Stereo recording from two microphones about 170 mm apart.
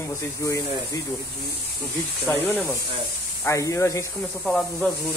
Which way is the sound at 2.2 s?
10° left (ahead or behind).